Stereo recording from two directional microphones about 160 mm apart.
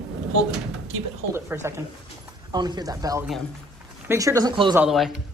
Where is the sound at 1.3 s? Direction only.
15° right (ahead or behind).